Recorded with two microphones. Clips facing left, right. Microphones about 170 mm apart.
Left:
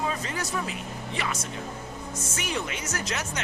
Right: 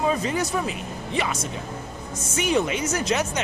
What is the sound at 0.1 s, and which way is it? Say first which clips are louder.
Speech: right 7 dB; 15° right (ahead or behind).